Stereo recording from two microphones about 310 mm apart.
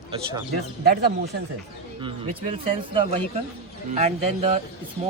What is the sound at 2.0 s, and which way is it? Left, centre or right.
Speech, centre.